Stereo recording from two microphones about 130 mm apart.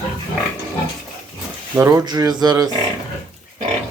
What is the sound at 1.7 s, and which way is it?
Speech, 25° right (ahead or behind).